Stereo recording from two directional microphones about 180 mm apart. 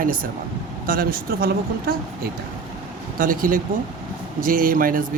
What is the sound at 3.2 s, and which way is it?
Speech, 50° right (ahead or behind).